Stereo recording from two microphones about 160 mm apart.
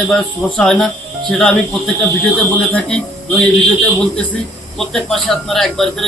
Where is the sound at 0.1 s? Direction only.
5° left (ahead or behind).